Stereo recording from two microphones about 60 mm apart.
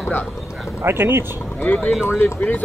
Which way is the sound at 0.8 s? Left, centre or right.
Right.